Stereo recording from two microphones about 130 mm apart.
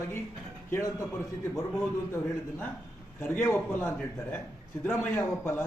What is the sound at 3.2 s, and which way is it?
A man's voice, 20° left (ahead or behind).